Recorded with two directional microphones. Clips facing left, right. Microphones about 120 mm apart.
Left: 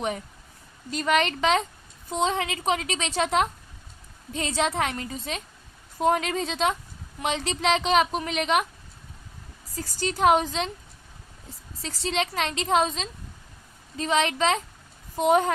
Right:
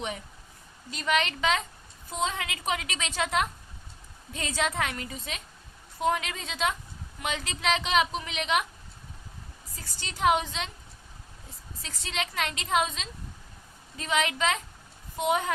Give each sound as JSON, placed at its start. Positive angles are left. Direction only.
{"t": 0.9, "sound": "a woman's voice", "side_deg": 40}
{"t": 9.7, "sound": "a woman's voice", "side_deg": 40}
{"t": 11.7, "sound": "a woman's voice", "side_deg": 30}